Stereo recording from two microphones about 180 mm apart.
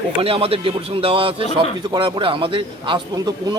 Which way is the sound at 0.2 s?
30° right (ahead or behind).